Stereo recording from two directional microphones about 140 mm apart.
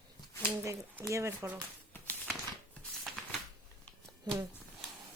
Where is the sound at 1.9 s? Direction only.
10° left (ahead or behind).